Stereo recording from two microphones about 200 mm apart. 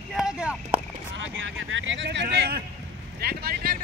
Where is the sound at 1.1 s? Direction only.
70° right (ahead or behind); by 2.6 s 50° right (ahead or behind).